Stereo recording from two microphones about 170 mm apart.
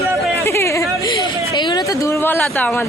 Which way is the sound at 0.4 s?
15° left (ahead or behind).